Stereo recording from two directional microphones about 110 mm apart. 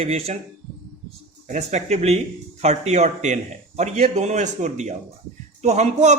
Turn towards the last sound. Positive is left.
turn(degrees=-90)